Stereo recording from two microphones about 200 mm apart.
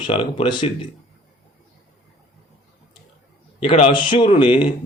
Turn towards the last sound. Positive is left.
turn(degrees=25)  # may be behind; listen again after turning